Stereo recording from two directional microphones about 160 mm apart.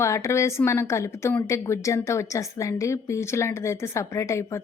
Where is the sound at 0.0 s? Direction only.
15° left (ahead or behind).